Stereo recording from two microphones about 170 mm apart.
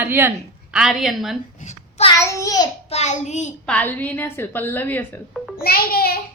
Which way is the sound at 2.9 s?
40° left (ahead or behind).